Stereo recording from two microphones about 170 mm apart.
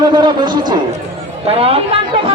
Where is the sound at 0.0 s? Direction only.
25° right (ahead or behind).